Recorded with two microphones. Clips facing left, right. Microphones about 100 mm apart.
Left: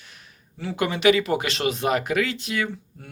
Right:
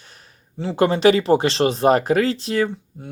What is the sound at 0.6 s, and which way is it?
Speech, 30° right (ahead or behind).